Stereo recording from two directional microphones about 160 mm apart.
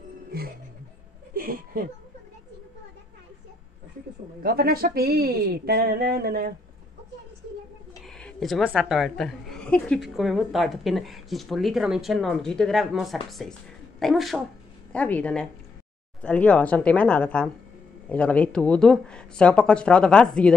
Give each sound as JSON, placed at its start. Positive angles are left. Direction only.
{"t": 0.3, "sound": "music", "side_deg": -70}
{"t": 1.3, "sound": "a sound", "side_deg": -65}
{"t": 4.4, "sound": "speech", "side_deg": -70}
{"t": 8.0, "sound": "a woman's voice", "side_deg": 5}